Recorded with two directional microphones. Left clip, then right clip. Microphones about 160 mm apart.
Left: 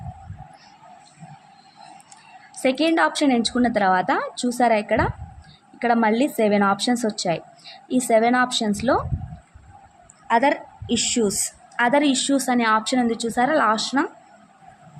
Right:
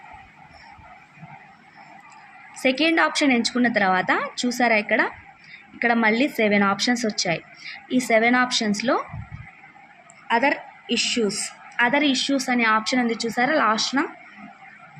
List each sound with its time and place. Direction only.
2.6 s a woman's voice: 10° left (ahead or behind)
10.2 s a woman's voice: 15° left (ahead or behind)